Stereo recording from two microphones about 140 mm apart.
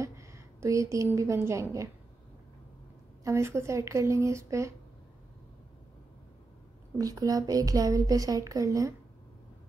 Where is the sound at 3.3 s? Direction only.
20° right (ahead or behind).